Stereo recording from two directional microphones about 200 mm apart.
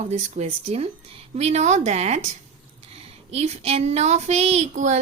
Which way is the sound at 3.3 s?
30° right (ahead or behind).